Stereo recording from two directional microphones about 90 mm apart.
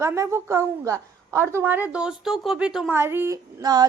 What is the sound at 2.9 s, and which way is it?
Speech, 25° right (ahead or behind).